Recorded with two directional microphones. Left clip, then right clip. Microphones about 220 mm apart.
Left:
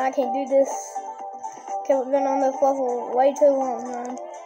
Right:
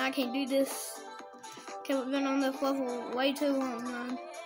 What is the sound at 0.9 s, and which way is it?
Music, 20° right (ahead or behind).